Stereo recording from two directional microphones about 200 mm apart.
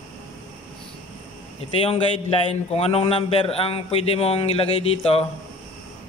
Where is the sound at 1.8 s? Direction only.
30° left (ahead or behind).